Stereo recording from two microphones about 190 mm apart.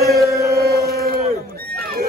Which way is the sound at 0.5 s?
55° right (ahead or behind).